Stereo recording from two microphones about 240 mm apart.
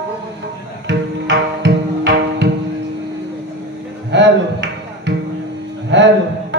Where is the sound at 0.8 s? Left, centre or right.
Right.